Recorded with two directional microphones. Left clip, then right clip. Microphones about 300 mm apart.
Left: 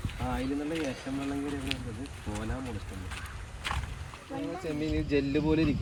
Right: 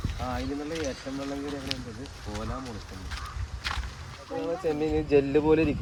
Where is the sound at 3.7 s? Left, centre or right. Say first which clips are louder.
Right 2 dB; centre.